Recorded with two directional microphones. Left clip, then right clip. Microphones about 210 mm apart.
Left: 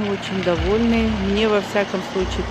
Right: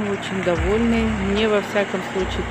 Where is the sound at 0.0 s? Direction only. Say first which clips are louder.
Left 1 dB; 30° left (ahead or behind).